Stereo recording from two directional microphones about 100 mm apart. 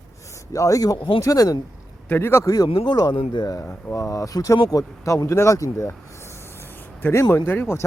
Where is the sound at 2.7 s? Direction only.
45° left (ahead or behind).